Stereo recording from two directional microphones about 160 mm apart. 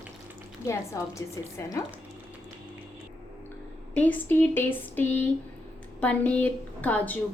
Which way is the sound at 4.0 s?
10° left (ahead or behind).